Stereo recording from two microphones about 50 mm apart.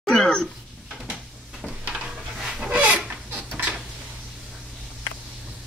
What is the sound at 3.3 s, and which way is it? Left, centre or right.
Dishes, right.